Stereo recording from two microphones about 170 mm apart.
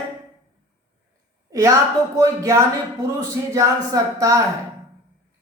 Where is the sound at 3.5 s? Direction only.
20° right (ahead or behind).